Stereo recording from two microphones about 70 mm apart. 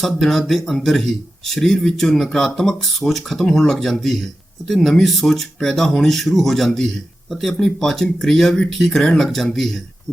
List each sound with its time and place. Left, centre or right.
0.0 s speech: centre